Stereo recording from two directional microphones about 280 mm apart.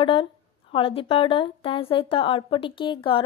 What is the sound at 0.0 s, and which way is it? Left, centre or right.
A woman's voice, centre.